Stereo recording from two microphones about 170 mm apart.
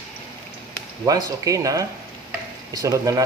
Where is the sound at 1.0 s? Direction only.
20° right (ahead or behind).